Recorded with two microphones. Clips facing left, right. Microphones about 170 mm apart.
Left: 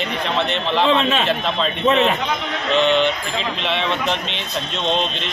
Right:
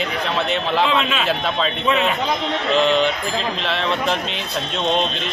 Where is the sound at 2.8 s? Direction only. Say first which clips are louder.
Left 1 dB; centre (ahead or behind).